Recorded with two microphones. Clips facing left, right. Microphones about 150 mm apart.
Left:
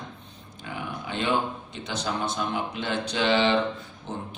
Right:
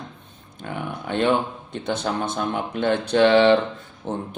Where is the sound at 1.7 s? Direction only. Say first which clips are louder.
Right 8 dB; 50° right (ahead or behind).